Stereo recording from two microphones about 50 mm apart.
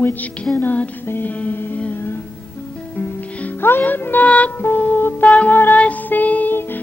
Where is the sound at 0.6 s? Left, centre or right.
Left.